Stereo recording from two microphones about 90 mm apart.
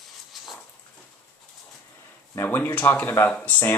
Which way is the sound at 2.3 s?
20° left (ahead or behind).